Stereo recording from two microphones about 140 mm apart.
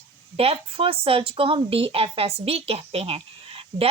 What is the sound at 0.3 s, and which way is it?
Speech, 45° right (ahead or behind).